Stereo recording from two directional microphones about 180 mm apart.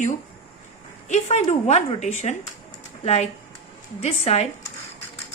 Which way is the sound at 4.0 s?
35° left (ahead or behind).